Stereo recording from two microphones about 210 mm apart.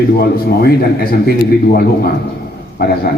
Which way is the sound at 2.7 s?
45° left (ahead or behind).